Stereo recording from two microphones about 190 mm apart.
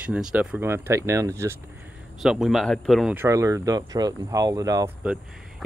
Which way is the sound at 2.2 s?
Centre (ahead or behind).